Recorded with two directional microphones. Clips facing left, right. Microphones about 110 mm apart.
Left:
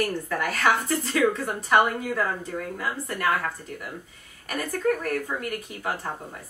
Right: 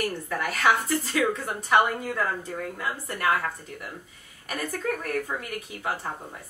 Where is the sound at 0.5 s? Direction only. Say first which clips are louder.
Right 1 dB; centre (ahead or behind).